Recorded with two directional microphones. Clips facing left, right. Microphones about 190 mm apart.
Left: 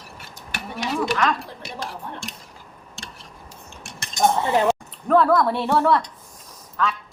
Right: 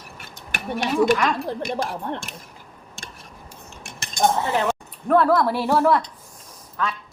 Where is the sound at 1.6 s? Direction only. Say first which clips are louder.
Right 7 dB; 55° right (ahead or behind).